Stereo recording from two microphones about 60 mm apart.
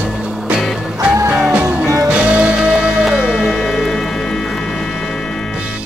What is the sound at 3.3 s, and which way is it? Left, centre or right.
Music, centre.